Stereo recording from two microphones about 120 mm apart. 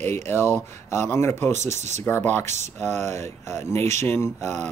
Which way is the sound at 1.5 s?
75° right (ahead or behind).